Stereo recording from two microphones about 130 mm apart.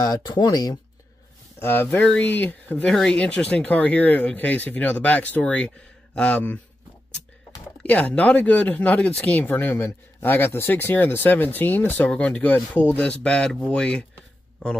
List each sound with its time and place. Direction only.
0.0 s speech: 30° left (ahead or behind)
1.6 s speech: 15° left (ahead or behind)
7.8 s speech: 10° left (ahead or behind)